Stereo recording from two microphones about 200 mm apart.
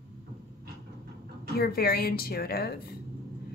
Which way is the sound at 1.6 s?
50° left (ahead or behind).